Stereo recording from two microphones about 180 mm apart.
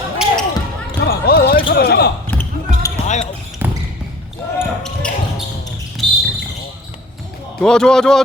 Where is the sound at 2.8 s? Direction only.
20° left (ahead or behind).